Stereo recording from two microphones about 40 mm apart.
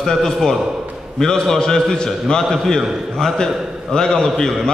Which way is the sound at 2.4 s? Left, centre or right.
Centre.